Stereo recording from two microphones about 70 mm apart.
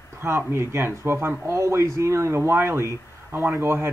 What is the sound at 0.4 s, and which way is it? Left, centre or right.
Speech, right.